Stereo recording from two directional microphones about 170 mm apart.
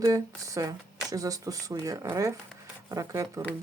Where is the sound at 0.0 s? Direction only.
20° right (ahead or behind).